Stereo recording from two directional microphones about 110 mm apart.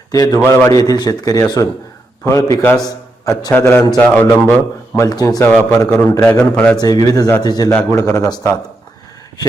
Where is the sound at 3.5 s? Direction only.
15° left (ahead or behind).